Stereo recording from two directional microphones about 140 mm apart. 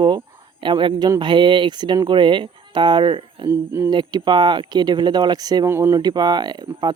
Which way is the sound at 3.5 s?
15° right (ahead or behind).